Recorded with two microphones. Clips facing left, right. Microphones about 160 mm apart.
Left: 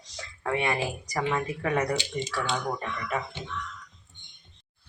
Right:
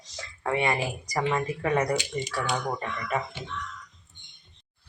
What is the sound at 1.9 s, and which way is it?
Speech, 25° left (ahead or behind).